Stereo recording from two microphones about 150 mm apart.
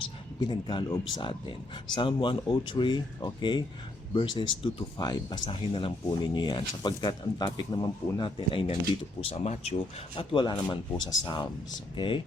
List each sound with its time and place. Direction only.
0.4 s speech: 30° left (ahead or behind); by 9.7 s 45° left (ahead or behind)
10.2 s speech: 30° left (ahead or behind)